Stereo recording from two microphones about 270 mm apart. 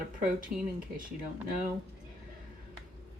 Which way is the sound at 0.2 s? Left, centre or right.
Right.